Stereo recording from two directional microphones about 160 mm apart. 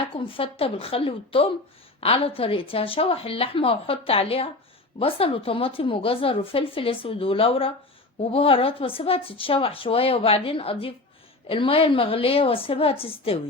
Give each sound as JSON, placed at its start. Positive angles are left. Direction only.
{"t": 0.3, "sound": "a woman's voice", "side_deg": 35}